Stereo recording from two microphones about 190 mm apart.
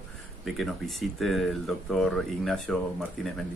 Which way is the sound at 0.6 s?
Centre (ahead or behind).